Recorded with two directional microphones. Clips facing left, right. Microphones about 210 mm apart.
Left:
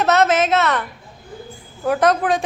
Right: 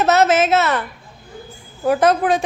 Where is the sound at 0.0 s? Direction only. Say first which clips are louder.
Right 1 dB; 5° right (ahead or behind).